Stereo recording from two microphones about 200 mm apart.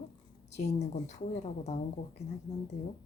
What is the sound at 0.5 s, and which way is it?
A woman's voice, 35° left (ahead or behind).